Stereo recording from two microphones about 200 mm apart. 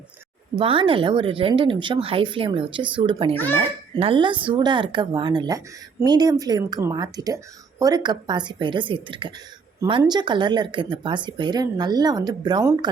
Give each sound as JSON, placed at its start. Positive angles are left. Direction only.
{"t": 0.6, "sound": "speech", "side_deg": -25}
{"t": 3.3, "sound": "a child's voice", "side_deg": 10}
{"t": 3.6, "sound": "speech", "side_deg": -25}